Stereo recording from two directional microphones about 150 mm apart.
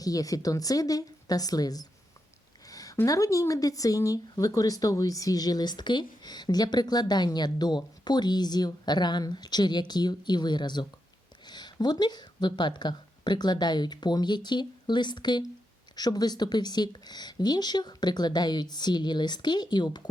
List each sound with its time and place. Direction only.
0.0 s speech: 25° left (ahead or behind)